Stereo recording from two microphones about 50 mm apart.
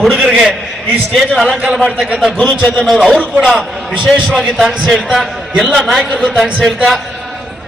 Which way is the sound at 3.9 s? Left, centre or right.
Centre.